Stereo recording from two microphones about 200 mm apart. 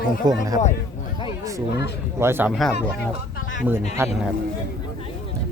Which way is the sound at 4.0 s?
15° right (ahead or behind).